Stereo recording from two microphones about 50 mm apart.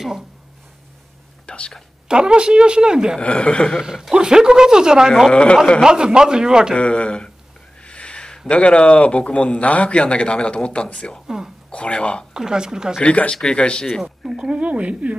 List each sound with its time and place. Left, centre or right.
1.4 s whispering: left
2.0 s speech: centre
3.2 s a man's voice: left
3.8 s speech: centre
5.3 s a man's voice: left
5.9 s speech: centre
6.8 s a man's voice: left
7.8 s a sound: left
8.5 s a man's voice: left
11.2 s speech: centre
11.7 s a man's voice: left
12.4 s speech: centre
13.0 s a man's voice: left
14.3 s speech: centre